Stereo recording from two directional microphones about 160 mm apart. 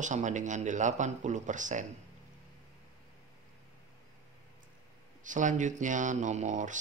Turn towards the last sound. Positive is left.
turn(degrees=-50)  # may be behind; listen again after turning